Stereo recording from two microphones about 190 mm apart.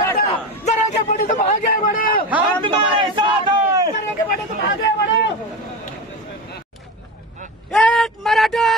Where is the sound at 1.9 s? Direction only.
50° left (ahead or behind).